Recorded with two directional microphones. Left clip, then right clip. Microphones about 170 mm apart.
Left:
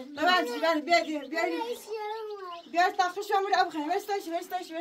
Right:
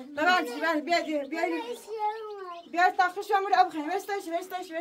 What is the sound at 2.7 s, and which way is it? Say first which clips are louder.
A woman's voice: right 2 dB; 5° right (ahead or behind).